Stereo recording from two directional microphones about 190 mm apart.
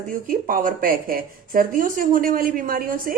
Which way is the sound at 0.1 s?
50° right (ahead or behind).